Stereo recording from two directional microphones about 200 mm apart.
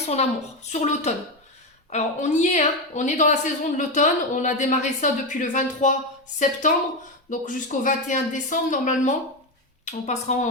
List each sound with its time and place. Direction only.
0.0 s a woman's voice: 35° left (ahead or behind)